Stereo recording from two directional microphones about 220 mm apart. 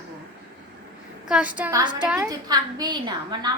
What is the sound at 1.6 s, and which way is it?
Speech, 15° right (ahead or behind).